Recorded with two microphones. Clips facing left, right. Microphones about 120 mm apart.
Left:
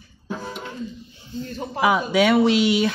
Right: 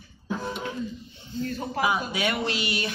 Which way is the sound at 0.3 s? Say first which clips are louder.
Right 1 dB; centre (ahead or behind).